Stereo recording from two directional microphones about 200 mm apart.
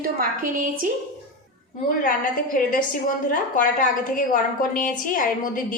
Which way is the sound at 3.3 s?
45° left (ahead or behind).